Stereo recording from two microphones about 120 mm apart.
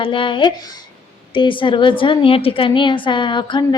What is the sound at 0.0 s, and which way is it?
A woman's voice, 45° left (ahead or behind).